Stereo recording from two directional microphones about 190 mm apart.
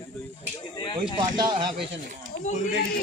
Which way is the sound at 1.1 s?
25° right (ahead or behind).